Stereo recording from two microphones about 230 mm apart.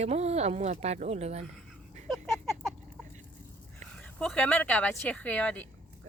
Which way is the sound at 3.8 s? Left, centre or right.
Centre.